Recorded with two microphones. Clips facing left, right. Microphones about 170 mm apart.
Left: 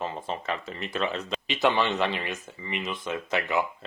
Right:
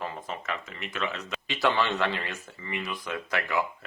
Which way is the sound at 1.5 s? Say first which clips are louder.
Left 2 dB; 20° left (ahead or behind).